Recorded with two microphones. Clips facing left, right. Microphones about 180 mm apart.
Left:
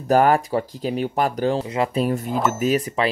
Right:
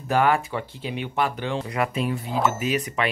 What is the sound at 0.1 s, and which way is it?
Speech, 40° left (ahead or behind).